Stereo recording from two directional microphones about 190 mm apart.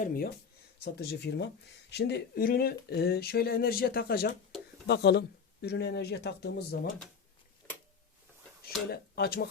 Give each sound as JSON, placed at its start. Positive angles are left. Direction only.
{"t": 0.0, "sound": "speech", "side_deg": 50}
{"t": 0.9, "sound": "speech", "side_deg": 60}
{"t": 8.9, "sound": "speech", "side_deg": 55}